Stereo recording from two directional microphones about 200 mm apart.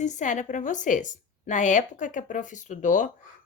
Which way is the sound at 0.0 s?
40° left (ahead or behind).